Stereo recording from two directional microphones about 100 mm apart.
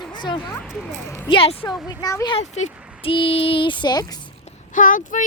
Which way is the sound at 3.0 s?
65° left (ahead or behind).